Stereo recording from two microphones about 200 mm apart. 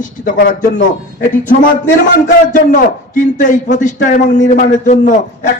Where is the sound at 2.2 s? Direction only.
40° left (ahead or behind).